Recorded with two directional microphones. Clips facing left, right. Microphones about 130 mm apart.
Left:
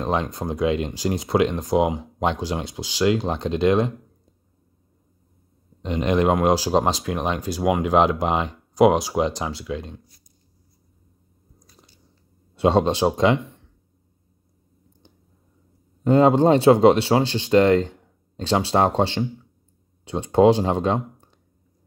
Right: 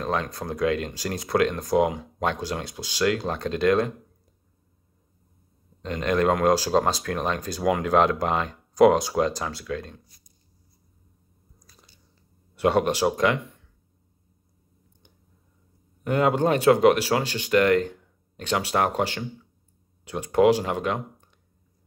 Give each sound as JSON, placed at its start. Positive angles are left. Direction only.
{"t": 0.0, "sound": "speech", "side_deg": 25}
{"t": 5.8, "sound": "speech", "side_deg": 20}
{"t": 12.5, "sound": "speech", "side_deg": 25}
{"t": 16.0, "sound": "speech", "side_deg": 25}